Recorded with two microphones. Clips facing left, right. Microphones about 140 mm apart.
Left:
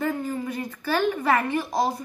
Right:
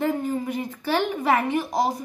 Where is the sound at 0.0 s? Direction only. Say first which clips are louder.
Right 2 dB; 20° right (ahead or behind).